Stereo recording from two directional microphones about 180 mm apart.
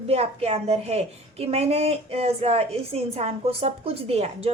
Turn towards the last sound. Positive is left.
turn(degrees=-35)  # may be behind; listen again after turning